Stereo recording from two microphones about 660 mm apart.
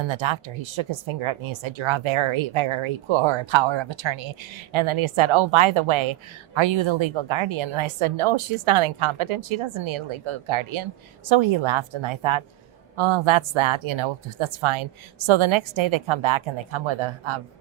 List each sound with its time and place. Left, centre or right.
0.0 s speech: right